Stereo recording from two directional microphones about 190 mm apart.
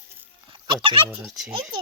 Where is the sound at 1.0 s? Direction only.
5° right (ahead or behind).